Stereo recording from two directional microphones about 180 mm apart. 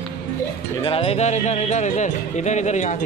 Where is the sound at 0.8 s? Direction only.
30° left (ahead or behind).